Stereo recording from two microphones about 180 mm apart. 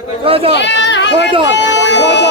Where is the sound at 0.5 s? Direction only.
75° left (ahead or behind).